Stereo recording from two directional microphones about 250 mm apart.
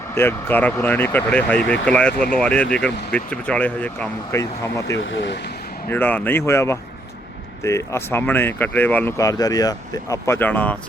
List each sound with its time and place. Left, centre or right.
0.1 s speech: centre
4.9 s speech: left
5.9 s speech: centre